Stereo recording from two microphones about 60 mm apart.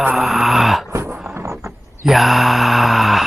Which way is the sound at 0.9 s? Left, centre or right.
Right.